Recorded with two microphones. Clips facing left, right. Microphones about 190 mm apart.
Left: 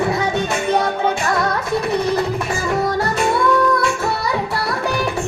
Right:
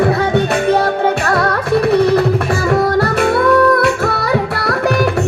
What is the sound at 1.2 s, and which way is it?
Music, 65° right (ahead or behind).